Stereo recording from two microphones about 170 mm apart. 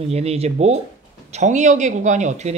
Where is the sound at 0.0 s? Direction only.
40° right (ahead or behind).